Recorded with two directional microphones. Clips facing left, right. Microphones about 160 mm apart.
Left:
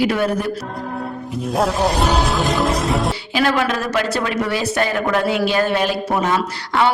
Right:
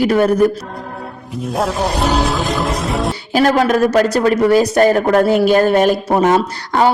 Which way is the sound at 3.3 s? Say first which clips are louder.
Right 6 dB; 45° right (ahead or behind).